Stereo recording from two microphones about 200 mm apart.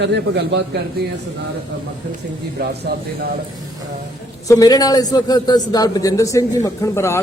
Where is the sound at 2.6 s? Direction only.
50° right (ahead or behind).